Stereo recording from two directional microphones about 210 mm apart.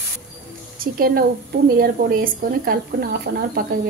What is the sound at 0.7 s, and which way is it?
Speech, 45° right (ahead or behind).